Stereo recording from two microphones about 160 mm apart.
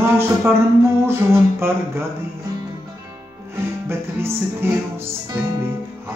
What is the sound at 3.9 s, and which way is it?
Speech, 15° right (ahead or behind).